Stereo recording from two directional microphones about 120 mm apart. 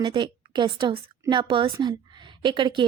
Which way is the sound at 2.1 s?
40° right (ahead or behind).